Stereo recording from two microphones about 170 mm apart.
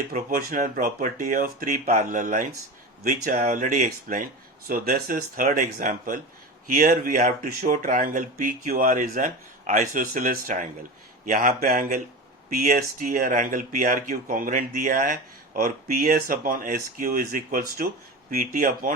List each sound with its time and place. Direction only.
0.1 s speech: 50° right (ahead or behind)